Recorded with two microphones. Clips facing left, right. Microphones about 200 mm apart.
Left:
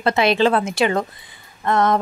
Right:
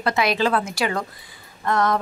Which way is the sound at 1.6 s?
25° left (ahead or behind).